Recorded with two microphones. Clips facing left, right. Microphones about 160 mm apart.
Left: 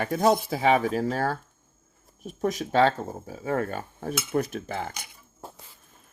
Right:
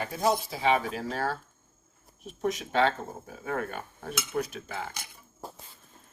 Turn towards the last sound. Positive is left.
turn(degrees=50)  # may be behind; listen again after turning